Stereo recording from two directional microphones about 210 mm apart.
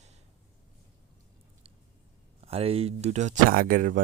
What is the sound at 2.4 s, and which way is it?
Speech, 30° right (ahead or behind).